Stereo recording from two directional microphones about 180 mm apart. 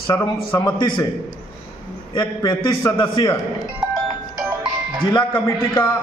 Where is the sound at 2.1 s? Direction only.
25° left (ahead or behind).